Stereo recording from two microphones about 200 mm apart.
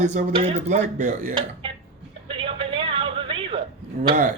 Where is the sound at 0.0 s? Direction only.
35° right (ahead or behind).